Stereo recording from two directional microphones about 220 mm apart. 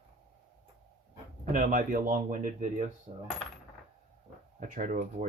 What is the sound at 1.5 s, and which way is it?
Speech, 35° right (ahead or behind).